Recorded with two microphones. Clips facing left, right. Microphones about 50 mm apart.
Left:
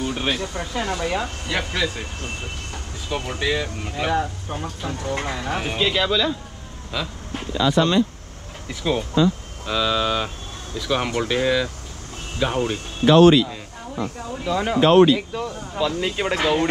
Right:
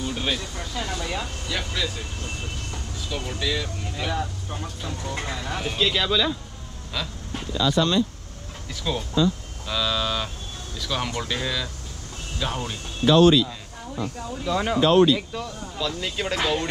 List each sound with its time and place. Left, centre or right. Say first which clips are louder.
0.0 s speech: left 3 dB; left
7.5 s speech: left 3 dB; left
8.6 s speech: left 5 dB; left
13.0 s speech: left 3 dB; left
14.5 s speech: left 2 dB; centre
14.8 s speech: left 4 dB; left
15.1 s speech: left 4 dB; centre